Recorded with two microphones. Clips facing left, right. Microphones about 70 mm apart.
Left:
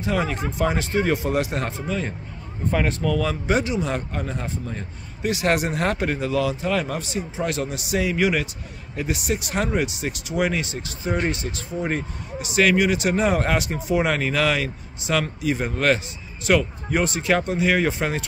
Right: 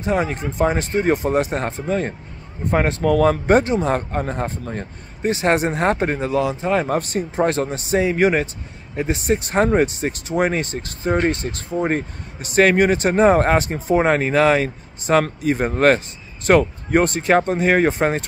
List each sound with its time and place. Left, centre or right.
0.0 s speech: right
7.0 s speech: right